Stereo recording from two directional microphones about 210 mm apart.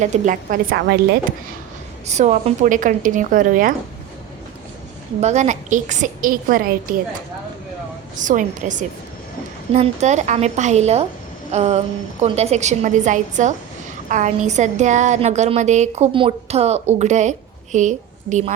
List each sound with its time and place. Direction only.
0.0 s a woman's voice: 35° right (ahead or behind)
2.0 s a woman's voice: 35° right (ahead or behind)
5.2 s a woman's voice: 35° right (ahead or behind)
8.1 s a woman's voice: 35° right (ahead or behind)